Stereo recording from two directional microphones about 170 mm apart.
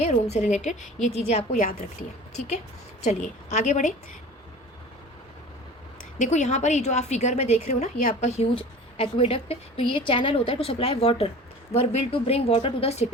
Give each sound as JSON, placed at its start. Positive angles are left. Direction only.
{"t": 0.0, "sound": "a woman's voice", "side_deg": 40}
{"t": 3.0, "sound": "a woman's voice", "side_deg": 45}
{"t": 6.1, "sound": "a woman's voice", "side_deg": 45}